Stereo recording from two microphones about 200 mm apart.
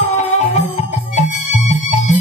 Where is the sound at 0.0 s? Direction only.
35° left (ahead or behind).